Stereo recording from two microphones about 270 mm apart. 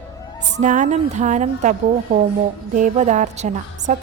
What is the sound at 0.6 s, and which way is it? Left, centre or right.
A woman's voice, right.